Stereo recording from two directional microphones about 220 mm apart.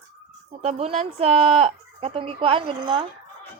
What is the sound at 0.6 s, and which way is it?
Speech, 30° right (ahead or behind).